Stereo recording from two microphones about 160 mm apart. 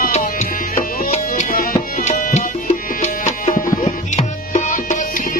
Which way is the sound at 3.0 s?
45° left (ahead or behind).